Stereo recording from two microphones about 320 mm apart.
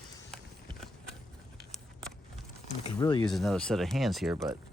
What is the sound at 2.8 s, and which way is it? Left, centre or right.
Speech, centre.